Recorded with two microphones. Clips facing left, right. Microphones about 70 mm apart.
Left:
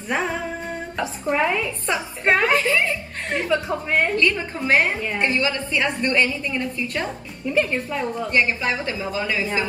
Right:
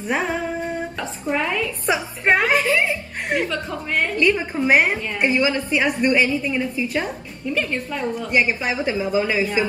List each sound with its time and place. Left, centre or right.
1.3 s a woman's voice: centre
1.9 s speech: centre
3.4 s a woman's voice: centre
4.2 s a woman's voice: centre
7.5 s a woman's voice: centre
8.3 s a woman's voice: centre